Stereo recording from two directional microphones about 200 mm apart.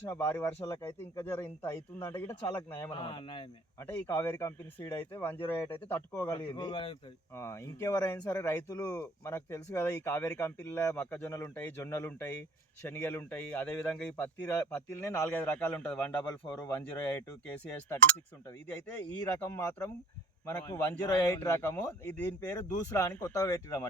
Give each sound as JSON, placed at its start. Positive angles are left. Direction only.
{"t": 0.1, "sound": "speech", "side_deg": 10}
{"t": 2.9, "sound": "speech", "side_deg": 25}
{"t": 3.8, "sound": "speech", "side_deg": 10}
{"t": 6.5, "sound": "speech", "side_deg": 25}
{"t": 19.4, "sound": "speech", "side_deg": 10}